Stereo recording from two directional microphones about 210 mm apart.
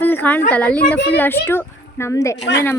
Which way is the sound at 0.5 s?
5° left (ahead or behind).